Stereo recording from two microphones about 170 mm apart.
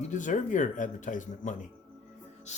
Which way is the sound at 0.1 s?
45° left (ahead or behind).